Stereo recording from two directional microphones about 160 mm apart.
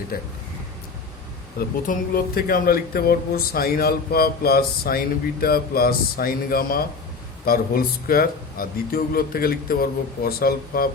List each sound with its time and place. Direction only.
1.5 s speech: 65° left (ahead or behind)